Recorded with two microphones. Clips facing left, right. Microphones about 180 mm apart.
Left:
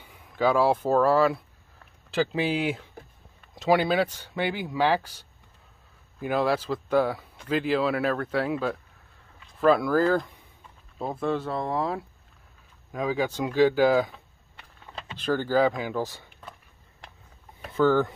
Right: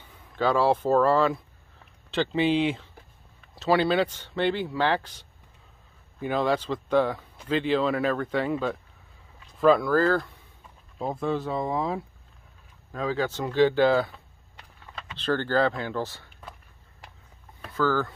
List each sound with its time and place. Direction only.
0.0 s speech: 10° left (ahead or behind)
11.0 s speech: centre (ahead or behind)
12.9 s speech: 15° left (ahead or behind)
15.1 s speech: 10° left (ahead or behind)
17.7 s speech: 20° left (ahead or behind)